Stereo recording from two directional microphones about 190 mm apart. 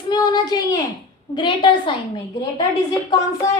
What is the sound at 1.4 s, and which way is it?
Speech, 25° left (ahead or behind).